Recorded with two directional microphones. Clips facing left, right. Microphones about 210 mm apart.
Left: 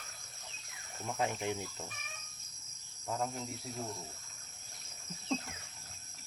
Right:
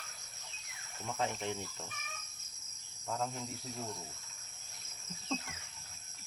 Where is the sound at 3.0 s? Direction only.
5° left (ahead or behind).